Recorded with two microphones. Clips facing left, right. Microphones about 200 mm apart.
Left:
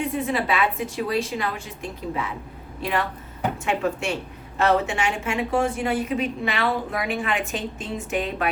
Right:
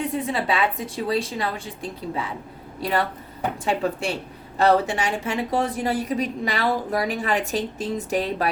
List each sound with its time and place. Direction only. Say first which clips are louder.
0.1 s a woman's voice: even; 30° right (ahead or behind)